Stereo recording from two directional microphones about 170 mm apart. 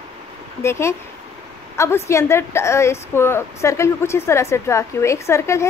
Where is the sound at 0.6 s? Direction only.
15° left (ahead or behind).